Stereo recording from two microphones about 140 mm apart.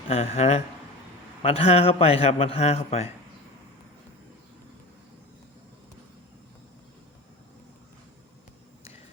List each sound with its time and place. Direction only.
0.1 s a man's voice: 50° left (ahead or behind)